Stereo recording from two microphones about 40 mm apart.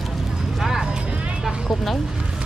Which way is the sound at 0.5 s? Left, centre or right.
Centre.